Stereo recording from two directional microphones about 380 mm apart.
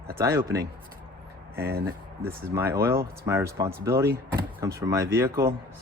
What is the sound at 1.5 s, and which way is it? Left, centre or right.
Speech, right.